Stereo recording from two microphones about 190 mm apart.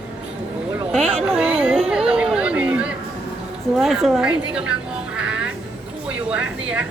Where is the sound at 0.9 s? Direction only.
5° right (ahead or behind).